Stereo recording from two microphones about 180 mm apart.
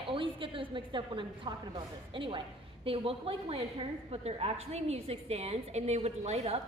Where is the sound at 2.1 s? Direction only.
30° right (ahead or behind).